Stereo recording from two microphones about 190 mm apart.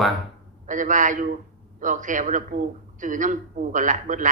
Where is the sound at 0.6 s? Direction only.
40° right (ahead or behind).